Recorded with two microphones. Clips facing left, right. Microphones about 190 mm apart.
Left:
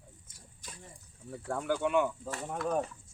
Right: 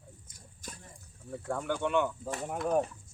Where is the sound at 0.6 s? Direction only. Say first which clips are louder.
Right 4 dB; 45° right (ahead or behind).